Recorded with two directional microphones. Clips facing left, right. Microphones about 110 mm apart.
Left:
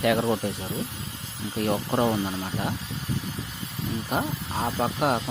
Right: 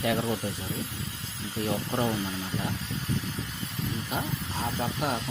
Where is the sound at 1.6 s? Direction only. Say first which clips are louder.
Left 4 dB; 65° left (ahead or behind).